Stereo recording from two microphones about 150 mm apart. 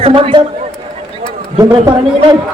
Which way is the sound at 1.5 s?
30° right (ahead or behind).